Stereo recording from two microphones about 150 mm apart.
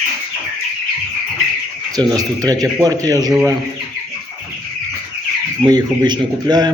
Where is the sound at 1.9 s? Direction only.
25° right (ahead or behind).